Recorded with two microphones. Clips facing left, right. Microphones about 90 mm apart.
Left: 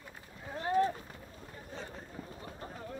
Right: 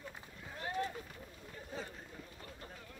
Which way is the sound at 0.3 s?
35° left (ahead or behind).